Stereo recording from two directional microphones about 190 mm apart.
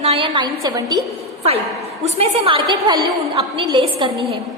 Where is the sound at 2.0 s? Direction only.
30° right (ahead or behind).